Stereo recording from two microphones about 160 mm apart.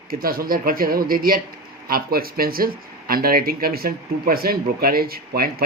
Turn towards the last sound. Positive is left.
turn(degrees=-70)  # may be behind; listen again after turning